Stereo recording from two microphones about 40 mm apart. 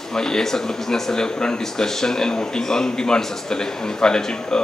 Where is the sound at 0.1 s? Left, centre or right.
Centre.